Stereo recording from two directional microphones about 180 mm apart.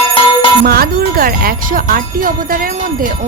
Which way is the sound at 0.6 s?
55° right (ahead or behind).